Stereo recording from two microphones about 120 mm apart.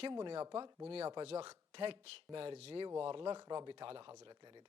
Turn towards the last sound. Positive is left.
turn(degrees=-40)  # may be behind; listen again after turning